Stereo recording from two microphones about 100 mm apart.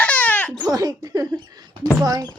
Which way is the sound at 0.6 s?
40° right (ahead or behind).